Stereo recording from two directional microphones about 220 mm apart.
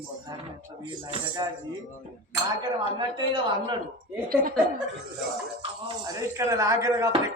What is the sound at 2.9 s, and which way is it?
Speech, 20° right (ahead or behind).